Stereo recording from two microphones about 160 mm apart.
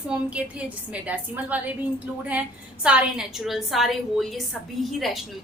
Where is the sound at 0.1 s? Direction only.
5° right (ahead or behind).